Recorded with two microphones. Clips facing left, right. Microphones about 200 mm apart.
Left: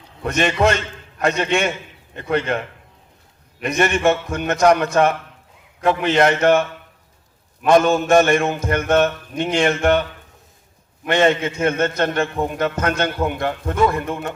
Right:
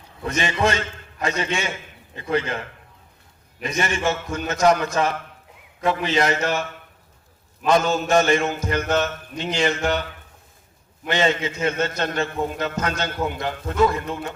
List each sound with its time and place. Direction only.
1.2 s a man's voice: 60° left (ahead or behind)
3.6 s a man's voice: 65° left (ahead or behind)
11.1 s a man's voice: 55° left (ahead or behind)